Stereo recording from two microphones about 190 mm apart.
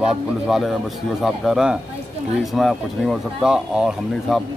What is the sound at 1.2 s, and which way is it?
Speech, centre (ahead or behind).